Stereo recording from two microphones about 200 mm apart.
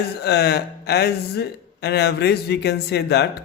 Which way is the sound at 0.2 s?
55° left (ahead or behind).